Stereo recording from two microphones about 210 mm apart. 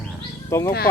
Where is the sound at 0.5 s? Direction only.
10° left (ahead or behind).